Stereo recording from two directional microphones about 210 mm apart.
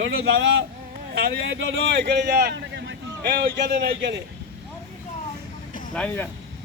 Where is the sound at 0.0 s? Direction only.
60° right (ahead or behind).